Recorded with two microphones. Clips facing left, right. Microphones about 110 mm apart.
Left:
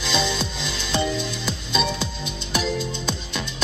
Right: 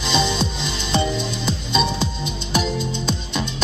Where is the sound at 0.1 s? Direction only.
20° right (ahead or behind).